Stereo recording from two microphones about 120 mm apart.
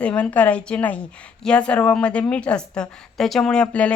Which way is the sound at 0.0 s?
10° left (ahead or behind).